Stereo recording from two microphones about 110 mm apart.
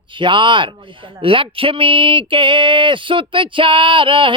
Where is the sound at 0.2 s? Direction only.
50° right (ahead or behind).